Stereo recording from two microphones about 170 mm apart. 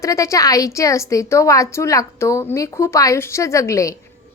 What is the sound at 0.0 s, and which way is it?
Speech, 20° left (ahead or behind).